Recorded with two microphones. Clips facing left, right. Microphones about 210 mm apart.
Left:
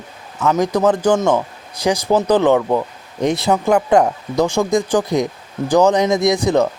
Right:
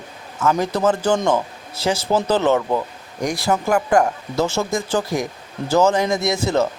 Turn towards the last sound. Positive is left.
turn(degrees=15)  # may be behind; listen again after turning